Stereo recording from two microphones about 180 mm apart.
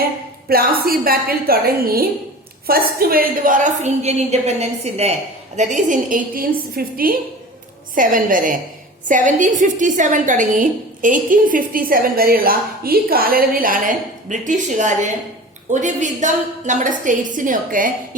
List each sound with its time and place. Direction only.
0.4 s a woman's voice: 55° right (ahead or behind)